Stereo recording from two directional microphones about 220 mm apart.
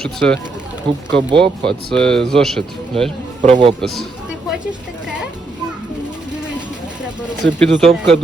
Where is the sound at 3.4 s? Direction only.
30° right (ahead or behind).